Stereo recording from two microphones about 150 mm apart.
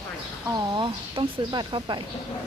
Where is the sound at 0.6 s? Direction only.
30° right (ahead or behind).